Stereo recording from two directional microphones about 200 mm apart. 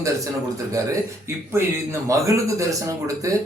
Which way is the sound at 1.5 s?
15° right (ahead or behind).